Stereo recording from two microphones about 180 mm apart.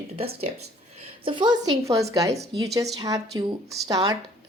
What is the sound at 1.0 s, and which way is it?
Speech, 30° right (ahead or behind).